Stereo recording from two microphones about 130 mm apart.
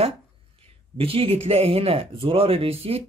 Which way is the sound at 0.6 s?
45° right (ahead or behind).